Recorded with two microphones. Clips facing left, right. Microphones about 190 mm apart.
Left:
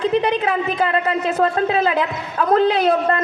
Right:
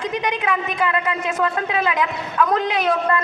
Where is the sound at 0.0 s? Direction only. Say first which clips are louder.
Left 6 dB; 30° left (ahead or behind).